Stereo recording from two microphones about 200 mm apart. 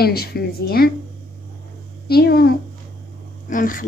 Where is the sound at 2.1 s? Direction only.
50° left (ahead or behind).